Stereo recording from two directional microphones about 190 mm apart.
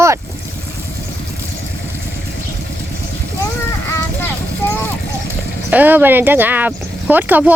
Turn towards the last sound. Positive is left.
turn(degrees=-10)  # may be behind; listen again after turning